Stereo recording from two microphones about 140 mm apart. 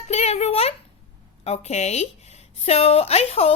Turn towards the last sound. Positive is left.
turn(degrees=45)  # may be behind; listen again after turning